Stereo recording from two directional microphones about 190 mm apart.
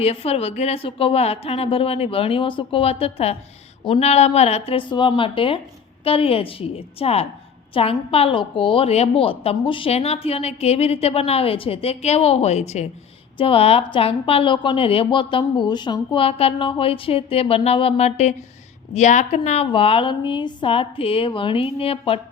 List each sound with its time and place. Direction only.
0.0 s a woman's voice: 30° left (ahead or behind)